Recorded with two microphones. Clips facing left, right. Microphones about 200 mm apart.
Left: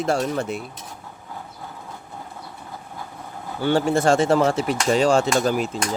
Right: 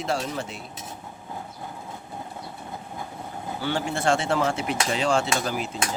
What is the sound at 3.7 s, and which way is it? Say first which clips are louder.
Speech: left 6 dB; 40° left (ahead or behind).